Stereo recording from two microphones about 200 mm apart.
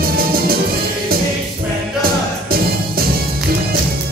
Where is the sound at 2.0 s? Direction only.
50° right (ahead or behind).